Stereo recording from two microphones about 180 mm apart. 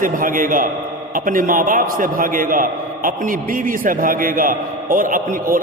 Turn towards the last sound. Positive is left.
turn(degrees=-50)  # may be behind; listen again after turning